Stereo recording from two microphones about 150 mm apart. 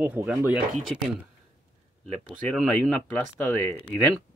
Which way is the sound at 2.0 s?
5° left (ahead or behind).